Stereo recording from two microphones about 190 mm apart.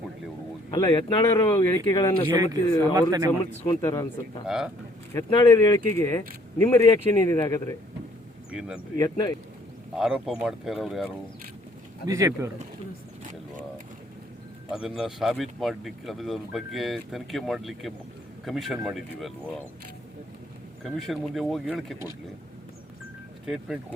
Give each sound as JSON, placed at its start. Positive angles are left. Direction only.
{"t": 0.7, "sound": "speech", "side_deg": 25}
{"t": 1.5, "sound": "speech", "side_deg": 15}
{"t": 2.9, "sound": "speech", "side_deg": -20}
{"t": 3.7, "sound": "speech", "side_deg": 15}
{"t": 4.4, "sound": "speech", "side_deg": -5}
{"t": 5.1, "sound": "speech", "side_deg": 20}
{"t": 8.4, "sound": "speech", "side_deg": -5}
{"t": 9.0, "sound": "speech", "side_deg": 20}
{"t": 10.0, "sound": "speech", "side_deg": -5}
{"t": 12.0, "sound": "speech", "side_deg": -15}
{"t": 14.7, "sound": "speech", "side_deg": -5}
{"t": 20.8, "sound": "speech", "side_deg": 0}
{"t": 23.5, "sound": "speech", "side_deg": -5}